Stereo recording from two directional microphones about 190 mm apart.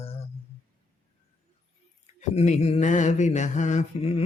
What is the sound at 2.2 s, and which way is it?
Mantra, 35° left (ahead or behind).